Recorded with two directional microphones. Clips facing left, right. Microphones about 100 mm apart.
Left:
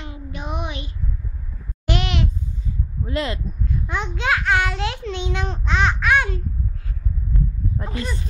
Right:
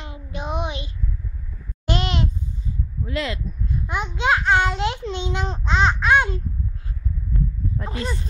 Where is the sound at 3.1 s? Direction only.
35° left (ahead or behind).